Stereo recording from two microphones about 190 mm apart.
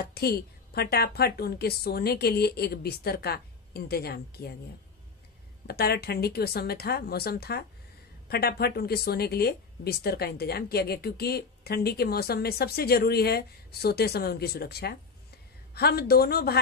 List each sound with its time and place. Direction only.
0.0 s speech: 55° left (ahead or behind)
5.7 s speech: 55° left (ahead or behind)